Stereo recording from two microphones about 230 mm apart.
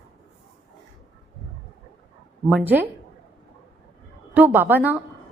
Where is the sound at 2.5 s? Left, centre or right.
Centre.